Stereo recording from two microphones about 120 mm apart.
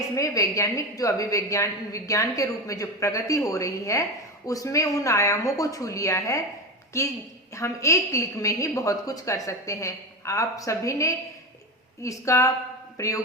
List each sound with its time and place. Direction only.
0.2 s a woman's voice: 25° left (ahead or behind)